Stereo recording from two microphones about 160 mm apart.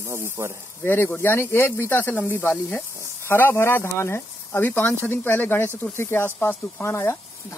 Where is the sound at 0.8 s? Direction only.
15° left (ahead or behind).